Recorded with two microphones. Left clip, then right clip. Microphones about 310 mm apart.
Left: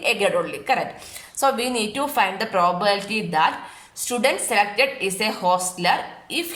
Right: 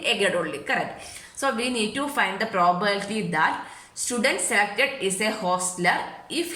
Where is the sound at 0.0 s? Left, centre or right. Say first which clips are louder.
Left 3 dB; centre.